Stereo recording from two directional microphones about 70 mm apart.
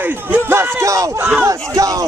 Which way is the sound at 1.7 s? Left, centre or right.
Right.